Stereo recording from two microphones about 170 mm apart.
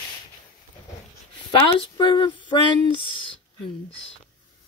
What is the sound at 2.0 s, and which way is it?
Female singing, 25° left (ahead or behind).